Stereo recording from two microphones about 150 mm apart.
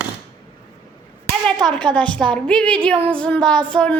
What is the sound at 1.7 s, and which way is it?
Child singing, 5° left (ahead or behind).